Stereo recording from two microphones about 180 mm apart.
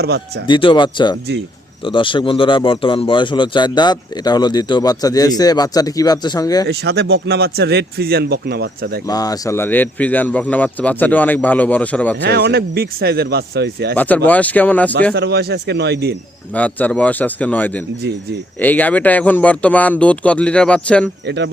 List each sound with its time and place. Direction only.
0.0 s speech: 60° right (ahead or behind)
0.4 s speech: 25° left (ahead or behind)
6.7 s speech: 65° right (ahead or behind)
9.0 s speech: 20° left (ahead or behind)
12.1 s speech: 65° right (ahead or behind)
13.9 s speech: 10° left (ahead or behind)
15.1 s speech: 65° right (ahead or behind)
16.6 s speech: 10° left (ahead or behind)
21.2 s speech: 70° right (ahead or behind)